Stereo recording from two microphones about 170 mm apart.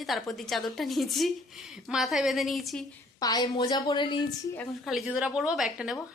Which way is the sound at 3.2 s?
20° left (ahead or behind).